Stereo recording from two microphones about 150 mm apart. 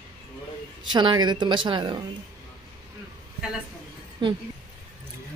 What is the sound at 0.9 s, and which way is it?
Speech, 30° right (ahead or behind).